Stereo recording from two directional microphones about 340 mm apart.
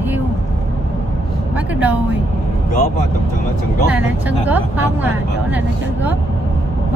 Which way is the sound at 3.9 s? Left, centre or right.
Centre.